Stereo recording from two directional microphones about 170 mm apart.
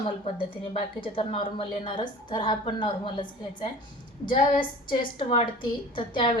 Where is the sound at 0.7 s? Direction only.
35° left (ahead or behind).